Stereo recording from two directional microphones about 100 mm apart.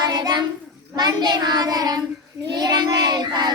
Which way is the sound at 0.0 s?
40° right (ahead or behind).